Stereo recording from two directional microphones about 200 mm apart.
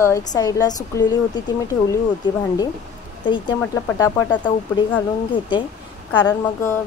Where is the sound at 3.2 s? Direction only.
20° left (ahead or behind).